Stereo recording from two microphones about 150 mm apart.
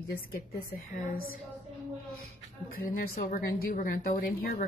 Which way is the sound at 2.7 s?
75° left (ahead or behind).